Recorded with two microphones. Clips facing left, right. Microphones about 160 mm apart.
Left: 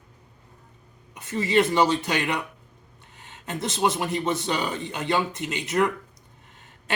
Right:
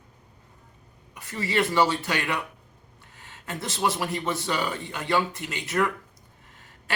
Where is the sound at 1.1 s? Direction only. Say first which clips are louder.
Left 5 dB; 20° left (ahead or behind).